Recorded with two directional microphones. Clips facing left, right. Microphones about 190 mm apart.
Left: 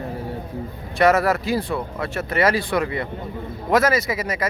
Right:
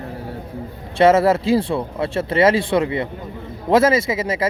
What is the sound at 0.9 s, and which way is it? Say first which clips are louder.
Speech: right 4 dB; 25° right (ahead or behind).